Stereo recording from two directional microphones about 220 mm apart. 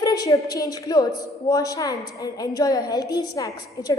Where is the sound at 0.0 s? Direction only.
15° left (ahead or behind).